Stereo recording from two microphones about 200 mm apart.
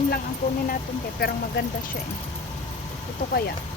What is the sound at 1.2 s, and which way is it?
Speech, 50° left (ahead or behind).